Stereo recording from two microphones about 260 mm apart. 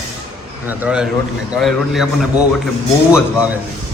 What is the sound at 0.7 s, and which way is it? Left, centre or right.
A man's voice, centre.